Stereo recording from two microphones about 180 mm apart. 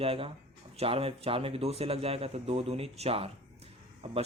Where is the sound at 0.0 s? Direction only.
30° right (ahead or behind).